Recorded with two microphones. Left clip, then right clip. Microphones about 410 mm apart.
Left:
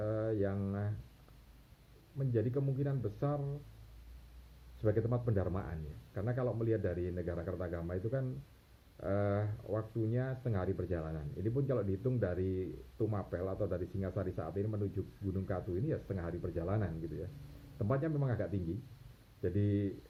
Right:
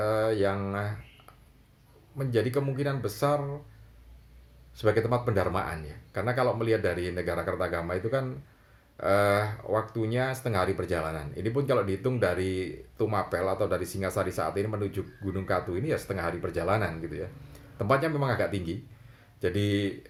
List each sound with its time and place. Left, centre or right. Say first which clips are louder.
0.0 s speech: right 10 dB; centre
2.1 s speech: right 9 dB; centre
4.8 s speech: right 10 dB; centre